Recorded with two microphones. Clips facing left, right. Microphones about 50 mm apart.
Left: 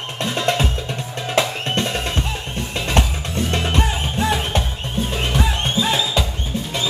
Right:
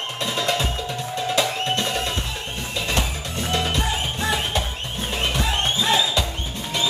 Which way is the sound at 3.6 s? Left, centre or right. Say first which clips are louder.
Left 3 dB; left.